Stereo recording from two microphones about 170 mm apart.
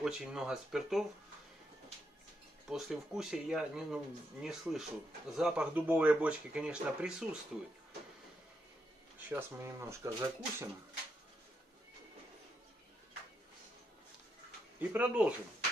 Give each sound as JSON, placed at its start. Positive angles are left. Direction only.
{"t": 0.0, "sound": "speech", "side_deg": -5}
{"t": 2.7, "sound": "speech", "side_deg": -5}
{"t": 9.3, "sound": "speech", "side_deg": -15}
{"t": 14.8, "sound": "speech", "side_deg": -10}